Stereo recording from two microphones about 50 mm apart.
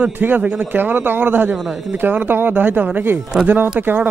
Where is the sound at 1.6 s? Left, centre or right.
Centre.